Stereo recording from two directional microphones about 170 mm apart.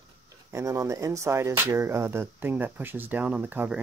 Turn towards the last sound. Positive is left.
turn(degrees=-10)  # may be behind; listen again after turning